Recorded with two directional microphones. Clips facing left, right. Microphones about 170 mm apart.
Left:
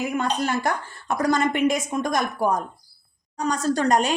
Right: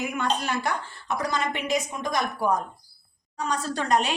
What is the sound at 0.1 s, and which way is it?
A woman's voice, 40° left (ahead or behind).